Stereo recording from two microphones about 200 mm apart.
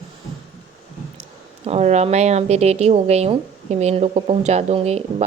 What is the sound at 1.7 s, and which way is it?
A woman's voice, 35° right (ahead or behind).